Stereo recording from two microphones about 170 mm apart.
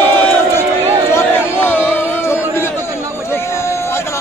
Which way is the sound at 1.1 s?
10° left (ahead or behind).